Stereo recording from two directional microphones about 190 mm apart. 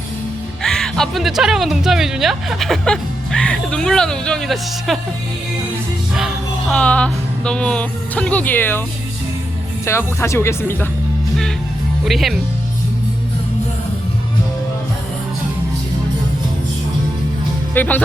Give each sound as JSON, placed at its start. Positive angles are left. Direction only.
{"t": 0.6, "sound": "speech", "side_deg": 5}
{"t": 6.1, "sound": "speech", "side_deg": 0}
{"t": 9.8, "sound": "speech", "side_deg": 15}
{"t": 12.0, "sound": "speech", "side_deg": 0}
{"t": 17.7, "sound": "speech", "side_deg": 10}